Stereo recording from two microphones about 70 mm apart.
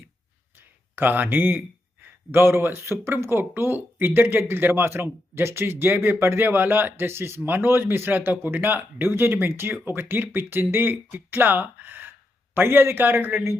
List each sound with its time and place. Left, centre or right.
0.5 s speech: right